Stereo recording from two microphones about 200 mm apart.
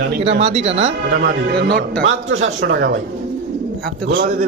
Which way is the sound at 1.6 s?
55° right (ahead or behind).